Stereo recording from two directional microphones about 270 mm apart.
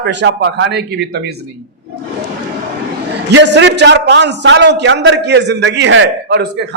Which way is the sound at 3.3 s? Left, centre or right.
Right.